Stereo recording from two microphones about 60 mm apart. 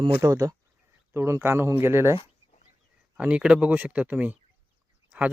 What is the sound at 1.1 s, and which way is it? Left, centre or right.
Speech, right.